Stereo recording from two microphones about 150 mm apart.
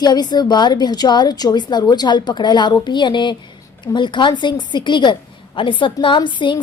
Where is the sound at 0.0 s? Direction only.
30° left (ahead or behind).